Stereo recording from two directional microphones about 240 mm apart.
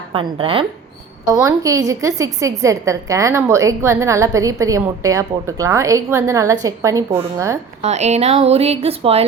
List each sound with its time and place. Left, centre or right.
0.1 s speech: right
1.3 s a woman's voice: centre
7.8 s speech: right